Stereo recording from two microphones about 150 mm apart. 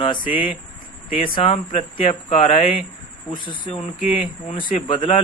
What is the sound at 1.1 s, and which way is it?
A man's voice, 40° left (ahead or behind).